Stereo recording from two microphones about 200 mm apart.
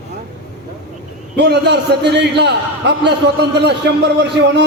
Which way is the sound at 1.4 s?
55° right (ahead or behind).